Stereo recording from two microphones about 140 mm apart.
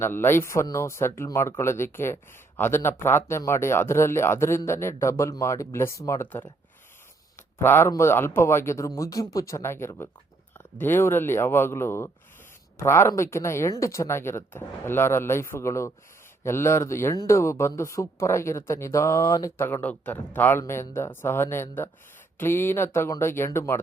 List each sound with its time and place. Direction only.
0.0 s speech: 15° left (ahead or behind)
7.6 s speech: 15° left (ahead or behind)